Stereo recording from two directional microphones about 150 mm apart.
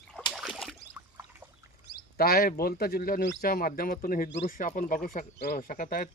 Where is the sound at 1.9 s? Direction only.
90° left.